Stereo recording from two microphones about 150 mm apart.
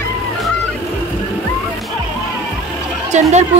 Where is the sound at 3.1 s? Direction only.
50° right (ahead or behind).